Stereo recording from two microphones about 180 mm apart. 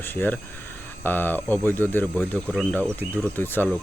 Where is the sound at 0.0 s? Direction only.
10° left (ahead or behind).